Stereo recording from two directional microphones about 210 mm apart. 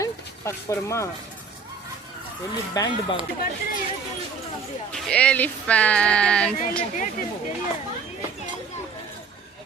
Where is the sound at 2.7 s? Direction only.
20° left (ahead or behind).